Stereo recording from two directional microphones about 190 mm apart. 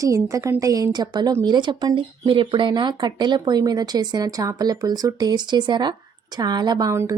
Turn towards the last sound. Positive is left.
turn(degrees=-15)  # may be behind; listen again after turning